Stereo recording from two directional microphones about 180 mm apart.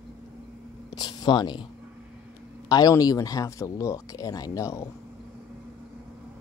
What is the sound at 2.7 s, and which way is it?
Speech, 20° left (ahead or behind).